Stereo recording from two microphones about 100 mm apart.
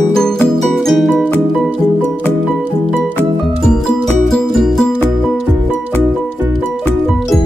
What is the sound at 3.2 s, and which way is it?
Music, 10° left (ahead or behind).